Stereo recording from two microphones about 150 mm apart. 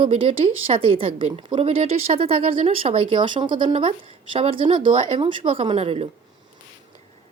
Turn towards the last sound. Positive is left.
turn(degrees=-40)  # may be behind; listen again after turning